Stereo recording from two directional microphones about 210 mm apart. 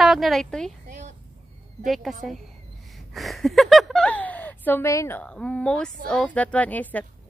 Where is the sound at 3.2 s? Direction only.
Centre (ahead or behind).